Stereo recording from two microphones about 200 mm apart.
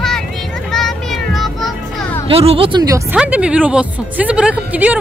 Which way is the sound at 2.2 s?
30° right (ahead or behind).